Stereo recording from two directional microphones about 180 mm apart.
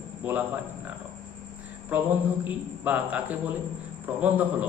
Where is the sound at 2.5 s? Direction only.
10° right (ahead or behind).